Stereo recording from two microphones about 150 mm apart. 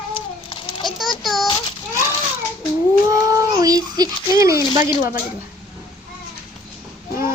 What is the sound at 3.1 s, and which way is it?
Speech, 20° right (ahead or behind).